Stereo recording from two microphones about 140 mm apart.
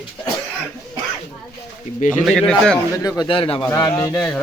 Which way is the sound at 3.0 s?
30° left (ahead or behind).